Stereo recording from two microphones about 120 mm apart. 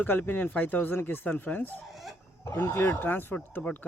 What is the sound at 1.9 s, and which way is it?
Chicken, centre (ahead or behind).